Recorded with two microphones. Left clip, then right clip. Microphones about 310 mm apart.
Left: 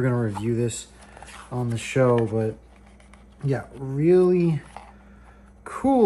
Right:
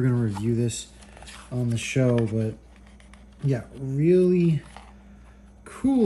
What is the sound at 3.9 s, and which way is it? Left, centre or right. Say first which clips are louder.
Speech: left 2 dB; left.